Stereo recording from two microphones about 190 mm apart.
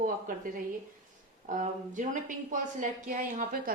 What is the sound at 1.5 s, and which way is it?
Speech, 40° right (ahead or behind).